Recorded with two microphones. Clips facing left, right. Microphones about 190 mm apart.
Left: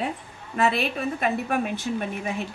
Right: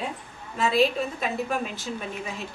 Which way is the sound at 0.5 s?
60° left (ahead or behind).